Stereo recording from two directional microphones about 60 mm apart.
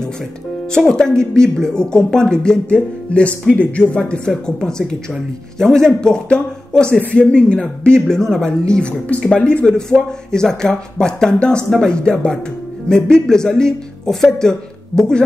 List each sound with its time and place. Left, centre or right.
0.8 s speech: centre